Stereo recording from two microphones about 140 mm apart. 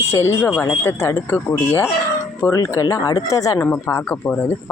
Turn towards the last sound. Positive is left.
turn(degrees=15)  # may be behind; listen again after turning